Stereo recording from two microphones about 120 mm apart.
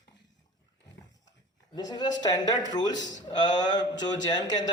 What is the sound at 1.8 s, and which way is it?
A man's voice, 35° left (ahead or behind).